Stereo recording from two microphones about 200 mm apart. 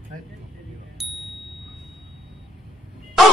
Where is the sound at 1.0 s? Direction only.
Centre (ahead or behind).